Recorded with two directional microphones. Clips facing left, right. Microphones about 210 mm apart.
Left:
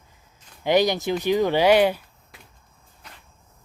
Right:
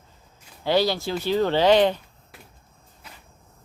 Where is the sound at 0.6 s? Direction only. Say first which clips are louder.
Left 2 dB; 15° left (ahead or behind).